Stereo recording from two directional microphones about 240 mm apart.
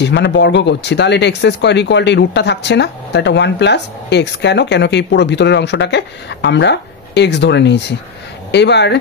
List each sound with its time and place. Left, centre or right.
0.0 s speech: left